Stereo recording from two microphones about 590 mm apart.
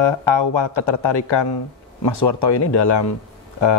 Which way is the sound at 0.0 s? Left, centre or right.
Left.